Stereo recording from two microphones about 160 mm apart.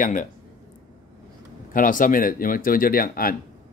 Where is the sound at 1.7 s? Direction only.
55° left (ahead or behind).